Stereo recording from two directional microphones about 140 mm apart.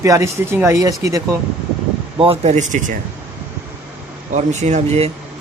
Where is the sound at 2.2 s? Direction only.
45° right (ahead or behind).